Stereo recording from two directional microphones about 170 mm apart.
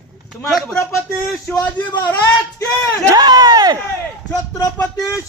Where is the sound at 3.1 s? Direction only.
25° right (ahead or behind).